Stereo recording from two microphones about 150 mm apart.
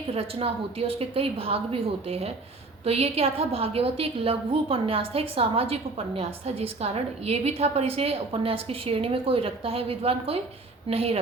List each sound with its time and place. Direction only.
0.1 s a woman's voice: 40° right (ahead or behind)